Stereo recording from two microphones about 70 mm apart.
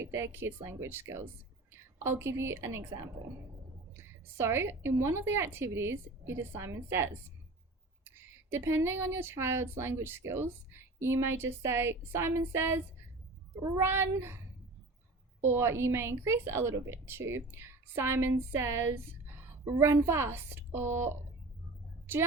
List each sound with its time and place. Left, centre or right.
0.0 s a woman's voice: right
4.4 s a woman's voice: right
8.4 s a woman's voice: right
15.4 s a woman's voice: right